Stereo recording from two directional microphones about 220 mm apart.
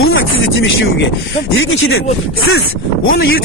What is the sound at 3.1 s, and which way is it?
Speech, 40° left (ahead or behind).